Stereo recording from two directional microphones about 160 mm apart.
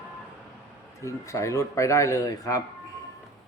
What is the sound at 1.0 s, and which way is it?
A man's voice, 20° left (ahead or behind).